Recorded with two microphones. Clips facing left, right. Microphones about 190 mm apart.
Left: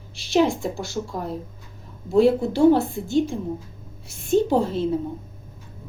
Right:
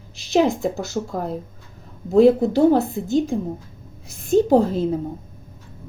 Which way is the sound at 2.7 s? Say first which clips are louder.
Right 2 dB; 40° right (ahead or behind).